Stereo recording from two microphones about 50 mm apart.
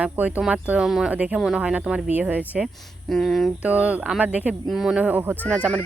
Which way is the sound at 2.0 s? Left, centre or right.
Right.